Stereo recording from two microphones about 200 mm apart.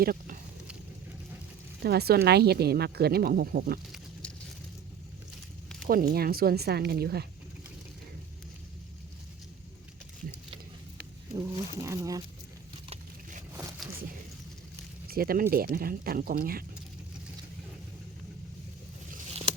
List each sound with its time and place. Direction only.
0.0 s speech: 45° right (ahead or behind)
1.8 s speech: 50° right (ahead or behind)
5.9 s speech: 45° right (ahead or behind)
11.8 s speech: 15° right (ahead or behind)
13.5 s a sound: 15° right (ahead or behind)
15.0 s speech: 50° right (ahead or behind)
19.3 s a sound: 30° right (ahead or behind)